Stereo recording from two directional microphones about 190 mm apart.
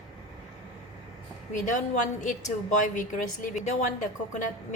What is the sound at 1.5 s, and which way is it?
A woman's voice, 40° left (ahead or behind).